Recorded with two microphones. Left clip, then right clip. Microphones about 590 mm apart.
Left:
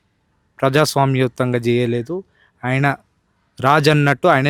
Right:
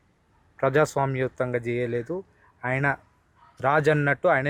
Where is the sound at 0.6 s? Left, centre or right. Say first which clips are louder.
Left 7 dB; left.